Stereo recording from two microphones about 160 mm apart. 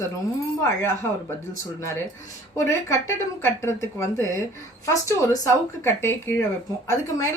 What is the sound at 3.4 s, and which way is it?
A woman's voice, 15° left (ahead or behind).